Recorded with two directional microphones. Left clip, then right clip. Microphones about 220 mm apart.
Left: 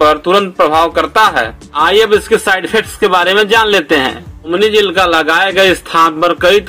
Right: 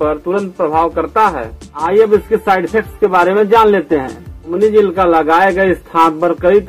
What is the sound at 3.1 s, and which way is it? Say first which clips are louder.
Speech: left 1 dB; 25° left (ahead or behind).